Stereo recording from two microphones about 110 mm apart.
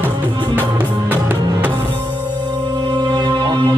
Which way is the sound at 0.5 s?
20° right (ahead or behind).